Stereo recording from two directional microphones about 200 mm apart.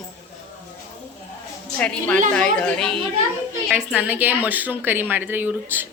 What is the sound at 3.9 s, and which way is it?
Speech, 10° right (ahead or behind).